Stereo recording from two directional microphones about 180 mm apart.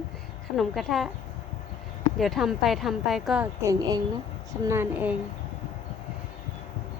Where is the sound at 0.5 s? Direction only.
Centre (ahead or behind).